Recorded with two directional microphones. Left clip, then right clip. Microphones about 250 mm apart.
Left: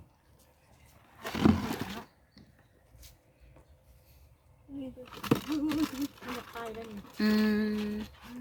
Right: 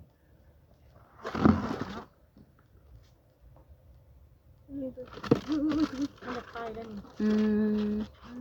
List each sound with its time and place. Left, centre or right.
1.2 s a sound: left
5.0 s speech: left
7.7 s music: left